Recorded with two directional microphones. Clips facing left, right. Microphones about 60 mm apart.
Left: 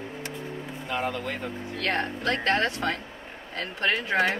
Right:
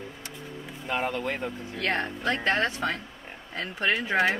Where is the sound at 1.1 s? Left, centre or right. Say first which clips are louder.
Right 1 dB; right; by 4.3 s centre.